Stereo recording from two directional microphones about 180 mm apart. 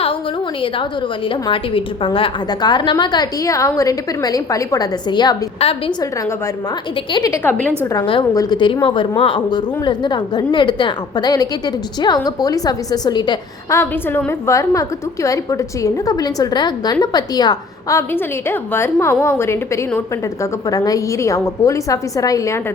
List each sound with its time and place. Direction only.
1.3 s a woman's voice: 30° left (ahead or behind)
7.1 s a woman's voice: 20° left (ahead or behind)
7.4 s a woman's voice: 5° left (ahead or behind)
7.9 s a woman's voice: 25° left (ahead or behind)